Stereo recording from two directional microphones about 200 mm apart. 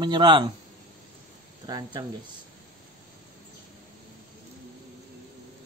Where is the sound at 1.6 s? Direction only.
20° right (ahead or behind).